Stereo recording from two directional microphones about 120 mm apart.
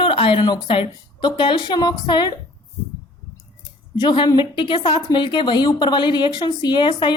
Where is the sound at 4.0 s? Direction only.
40° left (ahead or behind).